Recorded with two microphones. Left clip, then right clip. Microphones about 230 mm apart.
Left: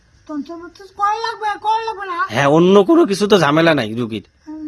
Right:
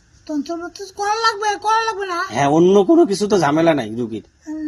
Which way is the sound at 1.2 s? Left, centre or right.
Centre.